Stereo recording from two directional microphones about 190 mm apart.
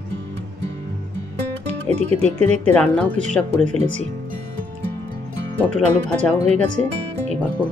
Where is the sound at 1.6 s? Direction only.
35° right (ahead or behind).